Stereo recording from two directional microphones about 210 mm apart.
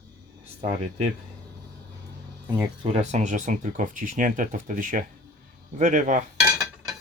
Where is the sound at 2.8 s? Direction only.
30° right (ahead or behind).